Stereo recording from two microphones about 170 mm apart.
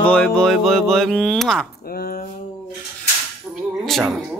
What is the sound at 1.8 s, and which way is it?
Speech, 60° left (ahead or behind).